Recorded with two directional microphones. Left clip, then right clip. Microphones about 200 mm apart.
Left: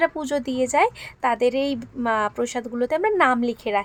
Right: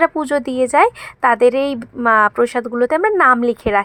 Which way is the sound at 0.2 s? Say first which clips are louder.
Right 7 dB; 15° right (ahead or behind).